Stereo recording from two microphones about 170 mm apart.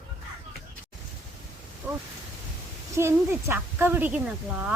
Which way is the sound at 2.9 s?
15° right (ahead or behind).